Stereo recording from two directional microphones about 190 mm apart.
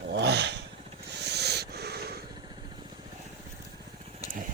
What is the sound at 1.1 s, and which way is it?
Owl, 60° right (ahead or behind).